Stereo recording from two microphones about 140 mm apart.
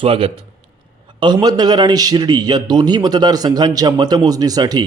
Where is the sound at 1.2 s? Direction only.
30° right (ahead or behind).